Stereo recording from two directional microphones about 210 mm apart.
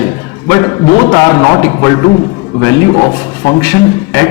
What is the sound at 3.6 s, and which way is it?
Speech, 10° left (ahead or behind).